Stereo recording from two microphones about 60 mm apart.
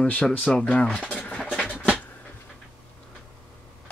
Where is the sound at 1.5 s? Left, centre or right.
Centre.